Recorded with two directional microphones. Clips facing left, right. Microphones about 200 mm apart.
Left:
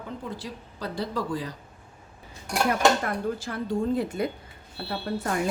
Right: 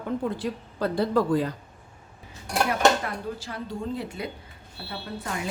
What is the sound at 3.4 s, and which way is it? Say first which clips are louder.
Speech: left 5 dB; 50° left (ahead or behind).